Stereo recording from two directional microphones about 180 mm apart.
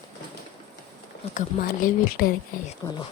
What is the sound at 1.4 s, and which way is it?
Speech, 50° left (ahead or behind).